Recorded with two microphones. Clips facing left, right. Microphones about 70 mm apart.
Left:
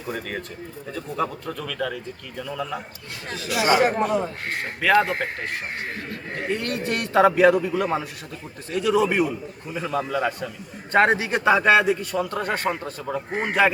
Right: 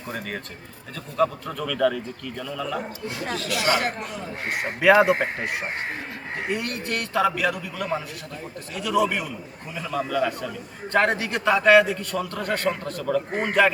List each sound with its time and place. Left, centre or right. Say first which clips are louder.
0.1 s speech: left 2 dB; centre
3.5 s a man's voice: left 5 dB; centre
4.4 s speech: right 9 dB; centre
6.8 s a man's voice: left 6 dB; left
13.3 s a man's voice: left 1 dB; centre